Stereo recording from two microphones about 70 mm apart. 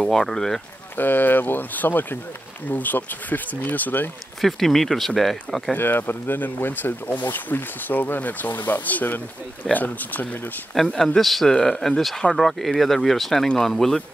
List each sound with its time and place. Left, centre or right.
0.0 s speech: centre
0.9 s speech: left
4.4 s speech: centre
5.8 s speech: left
10.8 s speech: centre